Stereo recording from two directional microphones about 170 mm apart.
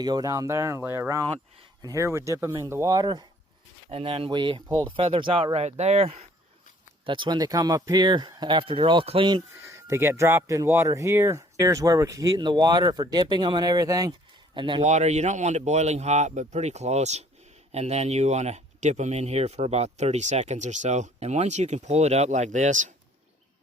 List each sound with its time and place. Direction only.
0.0 s speech: 20° right (ahead or behind)
3.9 s speech: 35° right (ahead or behind)
14.8 s speech: 45° right (ahead or behind)